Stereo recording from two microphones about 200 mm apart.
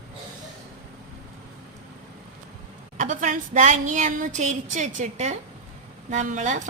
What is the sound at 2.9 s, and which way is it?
A woman's voice, 40° right (ahead or behind).